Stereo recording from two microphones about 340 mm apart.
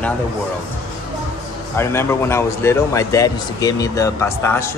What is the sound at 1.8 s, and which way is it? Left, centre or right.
A man's voice, centre.